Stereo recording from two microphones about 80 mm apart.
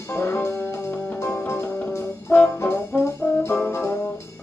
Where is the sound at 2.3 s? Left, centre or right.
Centre.